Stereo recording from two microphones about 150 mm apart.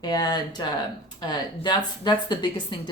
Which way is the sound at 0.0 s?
25° left (ahead or behind).